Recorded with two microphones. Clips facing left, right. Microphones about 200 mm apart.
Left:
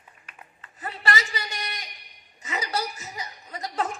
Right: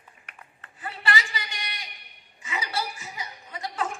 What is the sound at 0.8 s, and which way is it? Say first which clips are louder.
A man's voice: left 1 dB; 40° left (ahead or behind).